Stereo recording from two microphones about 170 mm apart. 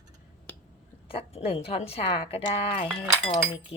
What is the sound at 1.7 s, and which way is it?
Speech, 35° left (ahead or behind).